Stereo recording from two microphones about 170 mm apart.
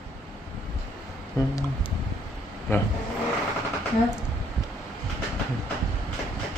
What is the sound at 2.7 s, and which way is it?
Speech, 15° left (ahead or behind).